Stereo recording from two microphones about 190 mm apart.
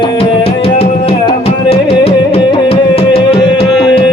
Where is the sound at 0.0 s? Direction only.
25° left (ahead or behind).